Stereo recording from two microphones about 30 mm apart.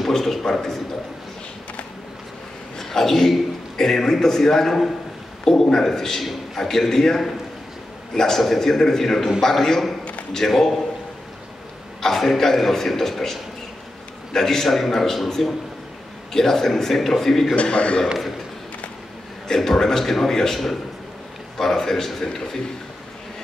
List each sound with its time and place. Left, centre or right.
0.1 s a man's voice: centre
2.8 s a man's voice: centre
9.0 s a man's voice: centre
12.2 s a man's voice: centre
17.6 s a man's voice: left
19.4 s a man's voice: centre
21.5 s a man's voice: centre